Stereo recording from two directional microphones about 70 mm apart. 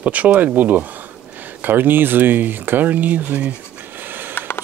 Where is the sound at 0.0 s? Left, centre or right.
Right.